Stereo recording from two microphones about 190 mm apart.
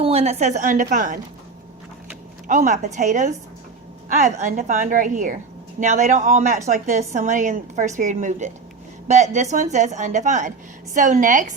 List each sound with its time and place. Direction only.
0.0 s a woman's voice: 35° right (ahead or behind)
2.5 s a woman's voice: 40° right (ahead or behind)